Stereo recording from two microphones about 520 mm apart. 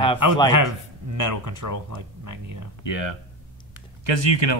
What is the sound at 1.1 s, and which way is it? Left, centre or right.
Speech, right.